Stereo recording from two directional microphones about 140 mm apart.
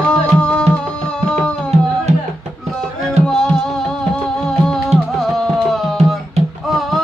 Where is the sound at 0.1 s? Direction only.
5° left (ahead or behind).